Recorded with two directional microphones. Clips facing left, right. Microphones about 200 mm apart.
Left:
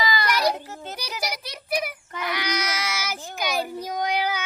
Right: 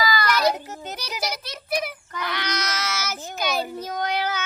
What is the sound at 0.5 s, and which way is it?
Child singing, 15° right (ahead or behind).